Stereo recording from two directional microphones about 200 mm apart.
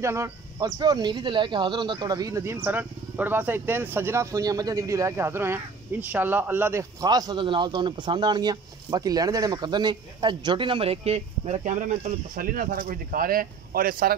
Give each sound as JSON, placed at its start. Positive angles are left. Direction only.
{"t": 0.0, "sound": "speech", "side_deg": -15}